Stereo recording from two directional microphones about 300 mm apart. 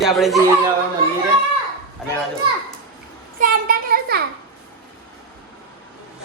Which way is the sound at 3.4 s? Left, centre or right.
Right.